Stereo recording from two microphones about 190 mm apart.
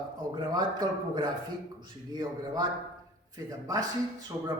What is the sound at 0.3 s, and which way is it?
Speech, 20° right (ahead or behind).